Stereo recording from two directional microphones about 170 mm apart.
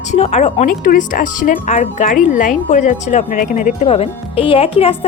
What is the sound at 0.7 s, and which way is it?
Speech, 55° left (ahead or behind).